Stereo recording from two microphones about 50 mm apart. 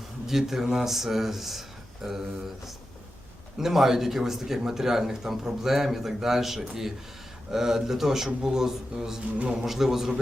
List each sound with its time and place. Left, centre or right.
0.3 s speech: centre
3.6 s a man's voice: centre
9.6 s speech: centre